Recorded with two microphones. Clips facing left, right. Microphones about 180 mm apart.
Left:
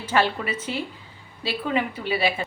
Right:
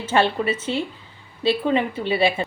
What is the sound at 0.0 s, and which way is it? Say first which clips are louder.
A woman's voice: right 3 dB; 25° right (ahead or behind).